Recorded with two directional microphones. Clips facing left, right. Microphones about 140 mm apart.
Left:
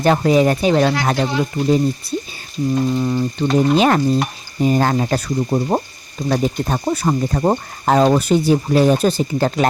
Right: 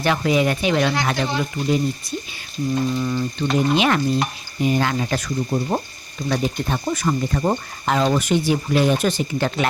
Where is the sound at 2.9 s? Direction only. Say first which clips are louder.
Left 4 dB; 30° left (ahead or behind).